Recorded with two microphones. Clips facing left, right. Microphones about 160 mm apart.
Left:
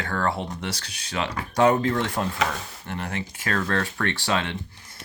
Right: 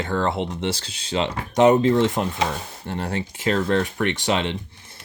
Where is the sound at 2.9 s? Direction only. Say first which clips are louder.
Right 4 dB; 30° right (ahead or behind).